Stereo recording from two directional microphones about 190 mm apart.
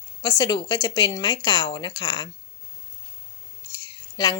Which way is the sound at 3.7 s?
20° left (ahead or behind).